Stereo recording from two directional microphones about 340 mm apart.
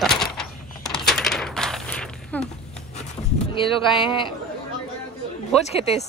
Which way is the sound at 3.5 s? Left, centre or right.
Centre.